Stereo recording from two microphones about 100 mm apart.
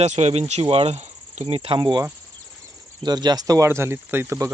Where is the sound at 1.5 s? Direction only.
70° right (ahead or behind).